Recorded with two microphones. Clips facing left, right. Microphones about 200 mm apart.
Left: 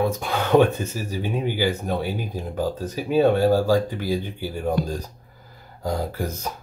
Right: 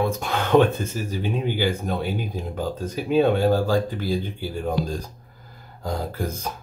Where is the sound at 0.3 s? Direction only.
10° left (ahead or behind).